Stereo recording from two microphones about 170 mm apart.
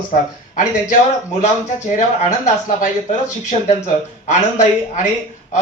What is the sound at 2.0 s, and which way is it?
Speech, 45° left (ahead or behind).